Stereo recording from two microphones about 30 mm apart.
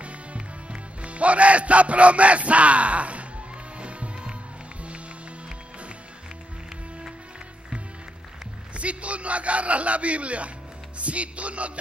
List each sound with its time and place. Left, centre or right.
0.0 s music: right
8.7 s a man's voice: right
11.0 s music: right